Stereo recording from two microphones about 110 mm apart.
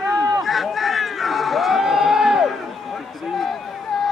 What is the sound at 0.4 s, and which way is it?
Crowd, centre (ahead or behind).